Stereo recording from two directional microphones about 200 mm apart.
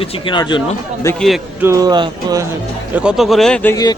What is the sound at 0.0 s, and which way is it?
A man's voice, 25° left (ahead or behind).